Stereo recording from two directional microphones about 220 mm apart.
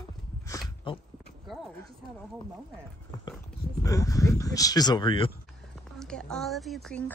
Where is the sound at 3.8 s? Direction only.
15° left (ahead or behind).